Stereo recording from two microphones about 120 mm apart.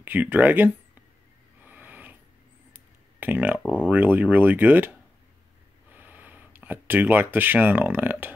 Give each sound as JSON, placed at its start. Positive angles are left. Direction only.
{"t": 0.0, "sound": "speech", "side_deg": -15}
{"t": 1.6, "sound": "a sound", "side_deg": -15}
{"t": 2.7, "sound": "speech", "side_deg": -15}
{"t": 5.9, "sound": "speech", "side_deg": -15}